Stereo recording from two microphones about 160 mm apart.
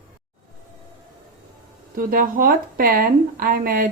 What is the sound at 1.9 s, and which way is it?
A woman's voice, 60° right (ahead or behind).